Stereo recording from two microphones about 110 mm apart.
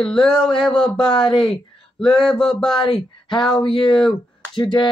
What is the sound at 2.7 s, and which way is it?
Speech, 45° left (ahead or behind).